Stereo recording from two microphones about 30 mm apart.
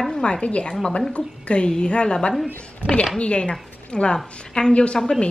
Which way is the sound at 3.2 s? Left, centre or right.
Left.